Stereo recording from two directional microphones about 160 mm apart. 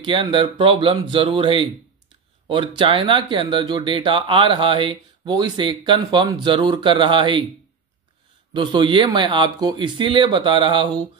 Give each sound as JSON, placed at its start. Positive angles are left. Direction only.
{"t": 0.0, "sound": "speech", "side_deg": -30}
{"t": 8.5, "sound": "speech", "side_deg": -30}